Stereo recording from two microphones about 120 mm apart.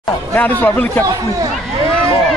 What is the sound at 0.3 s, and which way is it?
Speech, 15° left (ahead or behind).